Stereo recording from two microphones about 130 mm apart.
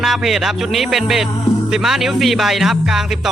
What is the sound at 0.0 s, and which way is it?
Speech, centre (ahead or behind).